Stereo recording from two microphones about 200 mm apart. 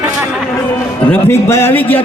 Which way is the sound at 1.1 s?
10° left (ahead or behind).